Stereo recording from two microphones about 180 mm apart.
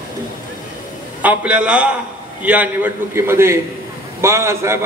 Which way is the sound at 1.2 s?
5° right (ahead or behind).